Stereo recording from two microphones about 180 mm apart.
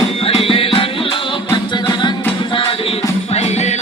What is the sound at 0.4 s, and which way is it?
Music, 30° left (ahead or behind).